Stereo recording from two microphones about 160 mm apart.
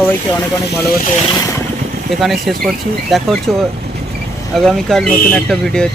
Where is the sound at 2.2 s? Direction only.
Centre (ahead or behind).